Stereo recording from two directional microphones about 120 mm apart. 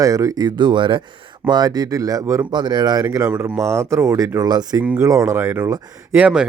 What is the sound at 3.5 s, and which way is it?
Speech, 25° right (ahead or behind).